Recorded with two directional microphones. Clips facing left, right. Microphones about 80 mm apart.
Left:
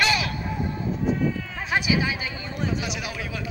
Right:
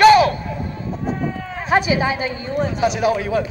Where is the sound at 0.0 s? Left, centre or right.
Right.